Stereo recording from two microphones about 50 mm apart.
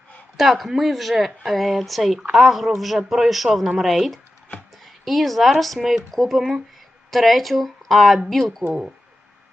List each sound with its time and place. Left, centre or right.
0.3 s speech: centre